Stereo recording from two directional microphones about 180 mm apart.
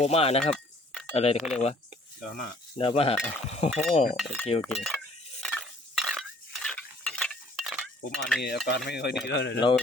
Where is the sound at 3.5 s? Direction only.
35° left (ahead or behind).